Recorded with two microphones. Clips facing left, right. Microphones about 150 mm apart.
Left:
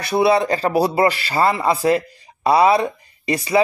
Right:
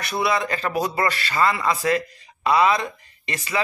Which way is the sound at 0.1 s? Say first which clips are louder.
Left 8 dB; 30° left (ahead or behind).